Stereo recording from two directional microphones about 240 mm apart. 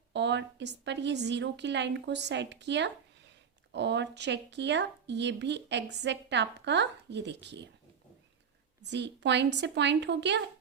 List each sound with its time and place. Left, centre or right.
0.1 s speech: right
8.8 s speech: right